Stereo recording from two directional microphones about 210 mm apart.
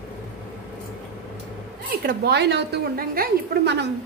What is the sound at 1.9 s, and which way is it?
A woman's voice, 45° right (ahead or behind).